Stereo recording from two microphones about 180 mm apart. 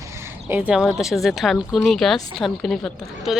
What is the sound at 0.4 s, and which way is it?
Speech, 10° right (ahead or behind).